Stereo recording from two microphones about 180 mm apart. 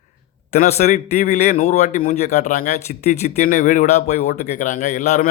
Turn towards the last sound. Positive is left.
turn(degrees=40)  # may be behind; listen again after turning